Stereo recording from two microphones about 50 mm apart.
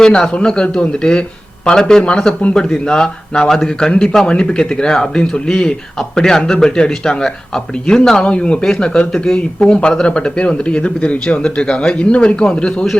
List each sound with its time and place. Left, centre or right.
0.0 s speech: centre